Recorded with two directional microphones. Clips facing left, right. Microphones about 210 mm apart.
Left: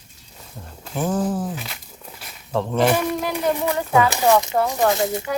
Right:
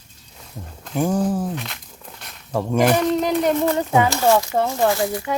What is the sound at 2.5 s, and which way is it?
Speech, 10° right (ahead or behind).